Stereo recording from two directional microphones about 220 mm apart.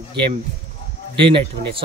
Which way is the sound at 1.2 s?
25° right (ahead or behind).